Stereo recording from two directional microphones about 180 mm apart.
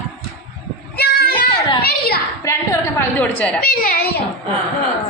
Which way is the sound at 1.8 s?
60° left (ahead or behind).